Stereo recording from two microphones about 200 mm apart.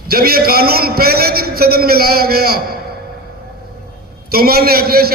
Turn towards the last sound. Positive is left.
turn(degrees=-50)  # may be behind; listen again after turning